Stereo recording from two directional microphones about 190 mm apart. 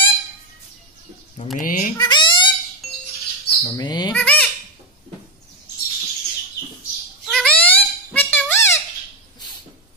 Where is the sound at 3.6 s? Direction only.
20° left (ahead or behind).